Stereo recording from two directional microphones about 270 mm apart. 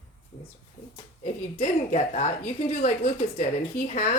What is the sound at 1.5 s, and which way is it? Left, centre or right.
Speech, left.